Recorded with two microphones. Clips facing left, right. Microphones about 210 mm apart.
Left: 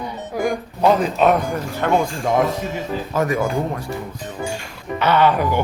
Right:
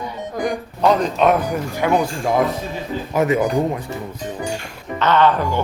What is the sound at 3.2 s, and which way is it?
Speech, 20° right (ahead or behind).